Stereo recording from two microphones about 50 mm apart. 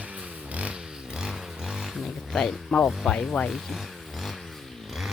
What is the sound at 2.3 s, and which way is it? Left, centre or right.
Speech, centre.